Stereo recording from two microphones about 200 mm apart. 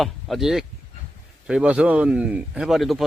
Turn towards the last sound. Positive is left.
turn(degrees=0)  # may be behind; listen again after turning